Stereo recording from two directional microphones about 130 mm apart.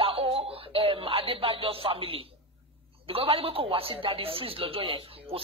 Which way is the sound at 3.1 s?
45° right (ahead or behind).